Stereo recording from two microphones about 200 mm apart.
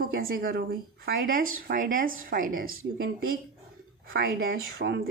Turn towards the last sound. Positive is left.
turn(degrees=-55)  # may be behind; listen again after turning